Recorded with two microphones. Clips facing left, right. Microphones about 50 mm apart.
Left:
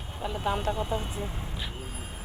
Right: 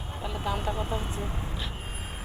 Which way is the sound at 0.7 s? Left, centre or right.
Right.